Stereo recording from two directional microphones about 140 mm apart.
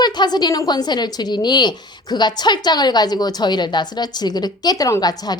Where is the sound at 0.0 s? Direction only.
30° left (ahead or behind).